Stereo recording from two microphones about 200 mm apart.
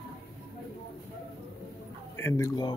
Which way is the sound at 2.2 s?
15° left (ahead or behind).